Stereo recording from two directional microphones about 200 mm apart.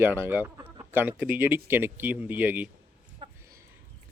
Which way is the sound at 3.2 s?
25° right (ahead or behind).